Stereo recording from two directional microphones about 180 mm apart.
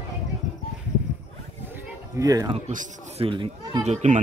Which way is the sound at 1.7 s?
20° right (ahead or behind).